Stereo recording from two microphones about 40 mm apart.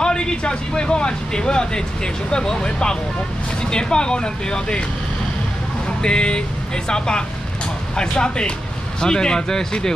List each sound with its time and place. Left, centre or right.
0.0 s speech: left
6.0 s speech: left